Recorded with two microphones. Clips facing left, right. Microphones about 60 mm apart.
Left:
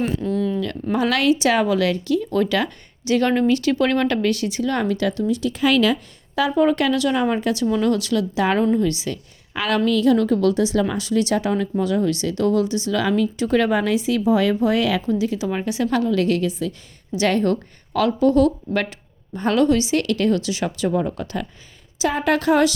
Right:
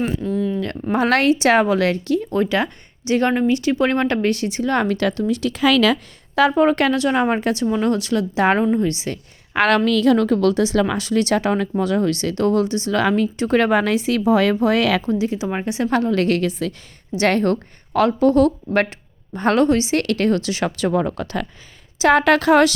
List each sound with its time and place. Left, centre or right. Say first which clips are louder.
0.0 s a sound: even; centre
0.6 s a woman's voice: right 2 dB; right
2.3 s a woman's voice: right 1 dB; right
4.8 s a woman's voice: right 2 dB; right
5.4 s speech: right 2 dB; right
6.3 s a woman's voice: right 3 dB; right
9.5 s a woman's voice: right 4 dB; right
15.0 s a woman's voice: right 1 dB; right
17.2 s a woman's voice: right 1 dB; right
21.9 s a woman's voice: right 6 dB; right